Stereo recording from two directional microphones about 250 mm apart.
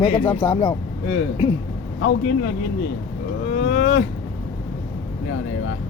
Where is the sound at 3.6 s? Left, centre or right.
Left.